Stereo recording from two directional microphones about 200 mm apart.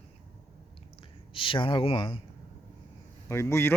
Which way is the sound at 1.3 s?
25° left (ahead or behind).